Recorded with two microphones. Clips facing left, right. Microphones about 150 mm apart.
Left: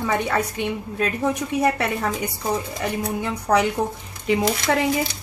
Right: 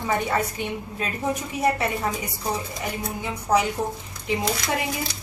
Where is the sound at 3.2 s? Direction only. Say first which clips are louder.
Left 1 dB; 65° left (ahead or behind).